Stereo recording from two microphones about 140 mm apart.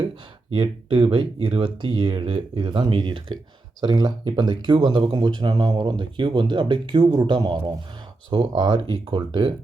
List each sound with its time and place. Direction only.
0.5 s speech: 35° right (ahead or behind)